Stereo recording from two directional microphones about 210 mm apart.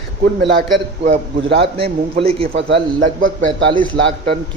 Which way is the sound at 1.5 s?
25° right (ahead or behind).